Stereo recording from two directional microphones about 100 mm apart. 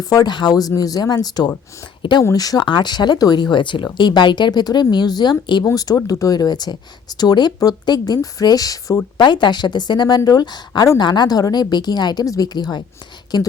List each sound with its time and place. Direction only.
0.0 s speech: 40° left (ahead or behind)
2.3 s speech: 40° left (ahead or behind)
5.7 s speech: 35° left (ahead or behind)
9.1 s speech: 50° left (ahead or behind)